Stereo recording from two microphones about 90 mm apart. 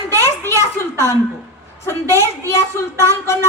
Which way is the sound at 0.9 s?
35° left (ahead or behind).